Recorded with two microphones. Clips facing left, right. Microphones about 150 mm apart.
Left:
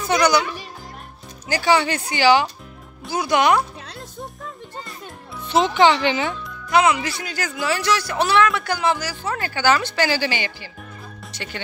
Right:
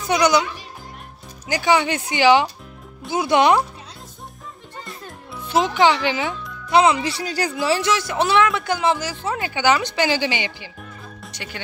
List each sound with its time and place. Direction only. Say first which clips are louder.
0.1 s a man's voice: right 1 dB; 20° right (ahead or behind)
1.5 s a man's voice: even; 15° right (ahead or behind)
5.0 s music: even; 10° right (ahead or behind)
6.7 s a man's voice: right 2 dB; 30° right (ahead or behind); by 11.6 s 10° right (ahead or behind)